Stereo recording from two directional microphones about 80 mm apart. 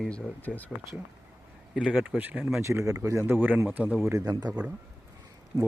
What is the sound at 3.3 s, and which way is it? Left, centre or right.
Speech, right.